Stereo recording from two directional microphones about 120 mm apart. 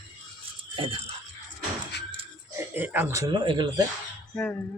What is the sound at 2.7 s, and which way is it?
Speech, 15° right (ahead or behind).